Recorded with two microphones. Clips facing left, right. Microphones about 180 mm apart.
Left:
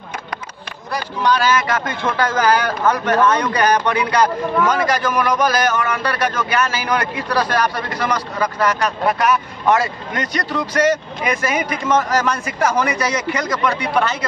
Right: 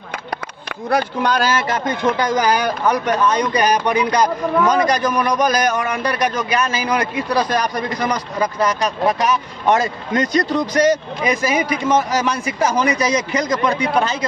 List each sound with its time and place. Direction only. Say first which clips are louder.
0.8 s speech: right 2 dB; 55° right (ahead or behind); by 1.7 s 35° right (ahead or behind)
1.7 s a man's voice: right 2 dB; 15° right (ahead or behind)